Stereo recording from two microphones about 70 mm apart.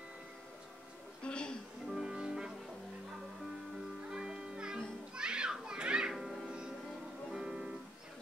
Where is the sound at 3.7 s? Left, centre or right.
Centre.